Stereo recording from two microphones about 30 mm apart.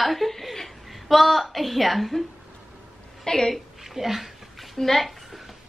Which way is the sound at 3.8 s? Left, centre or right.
Centre.